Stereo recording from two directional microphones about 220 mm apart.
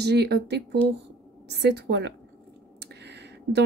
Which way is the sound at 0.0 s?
50° right (ahead or behind).